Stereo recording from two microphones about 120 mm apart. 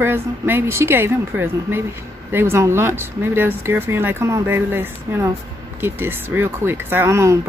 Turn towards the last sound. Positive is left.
turn(degrees=-25)  # may be behind; listen again after turning